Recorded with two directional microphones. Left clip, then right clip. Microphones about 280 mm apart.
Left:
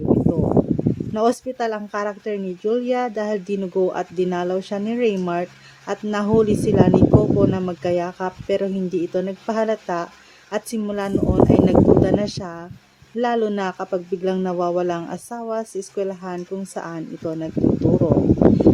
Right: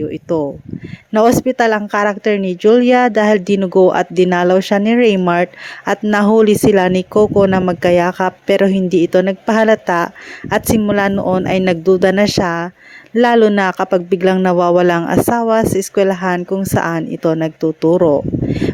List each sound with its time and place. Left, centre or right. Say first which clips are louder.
1.1 s speech: right 10 dB; right